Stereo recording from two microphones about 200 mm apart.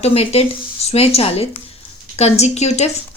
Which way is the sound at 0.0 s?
30° left (ahead or behind).